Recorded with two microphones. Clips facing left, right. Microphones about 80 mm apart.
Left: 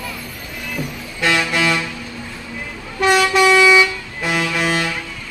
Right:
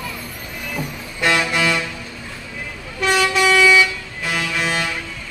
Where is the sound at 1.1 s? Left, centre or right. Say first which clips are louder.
Even; centre.